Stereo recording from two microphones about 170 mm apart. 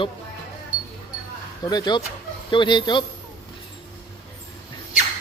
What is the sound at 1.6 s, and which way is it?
Speech, 25° left (ahead or behind).